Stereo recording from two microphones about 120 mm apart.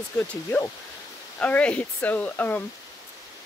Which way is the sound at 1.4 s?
10° left (ahead or behind).